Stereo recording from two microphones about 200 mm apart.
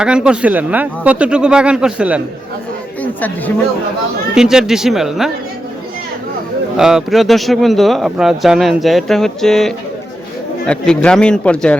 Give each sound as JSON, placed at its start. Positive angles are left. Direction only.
{"t": 0.0, "sound": "speech", "side_deg": -5}
{"t": 3.0, "sound": "speech", "side_deg": 10}
{"t": 4.4, "sound": "speech", "side_deg": -5}
{"t": 6.7, "sound": "speech", "side_deg": 0}